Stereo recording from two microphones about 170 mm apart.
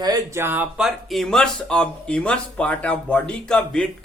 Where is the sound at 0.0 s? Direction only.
20° right (ahead or behind).